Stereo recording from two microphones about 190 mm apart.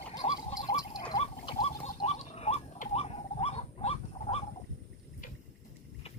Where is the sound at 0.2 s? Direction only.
35° left (ahead or behind).